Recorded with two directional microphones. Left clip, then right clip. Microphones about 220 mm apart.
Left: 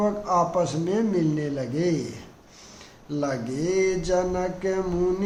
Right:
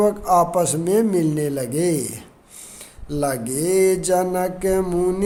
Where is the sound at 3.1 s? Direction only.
50° right (ahead or behind).